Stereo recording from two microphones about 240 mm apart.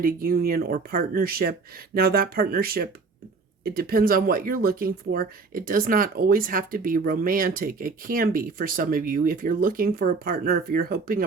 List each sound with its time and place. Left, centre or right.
0.0 s speech: right